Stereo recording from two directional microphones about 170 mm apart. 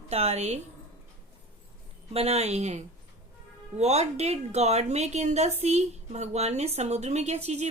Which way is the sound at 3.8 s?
40° right (ahead or behind).